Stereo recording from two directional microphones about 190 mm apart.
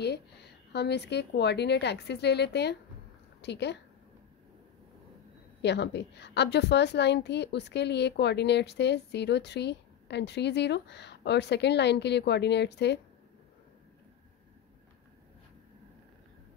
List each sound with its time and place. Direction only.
0.7 s a woman's voice: 60° left (ahead or behind)
5.6 s a woman's voice: 65° left (ahead or behind)